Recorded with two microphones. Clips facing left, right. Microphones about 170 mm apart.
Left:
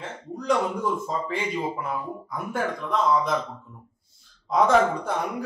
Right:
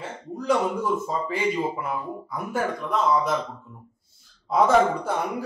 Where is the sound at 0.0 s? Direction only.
5° right (ahead or behind).